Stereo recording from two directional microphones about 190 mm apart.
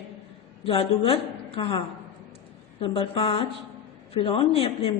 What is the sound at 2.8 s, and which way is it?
A woman's voice, 30° left (ahead or behind).